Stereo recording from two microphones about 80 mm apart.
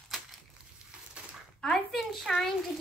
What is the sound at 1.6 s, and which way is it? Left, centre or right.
Speech, centre.